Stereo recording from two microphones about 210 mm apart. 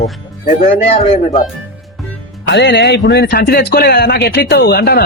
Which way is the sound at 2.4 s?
55° left (ahead or behind).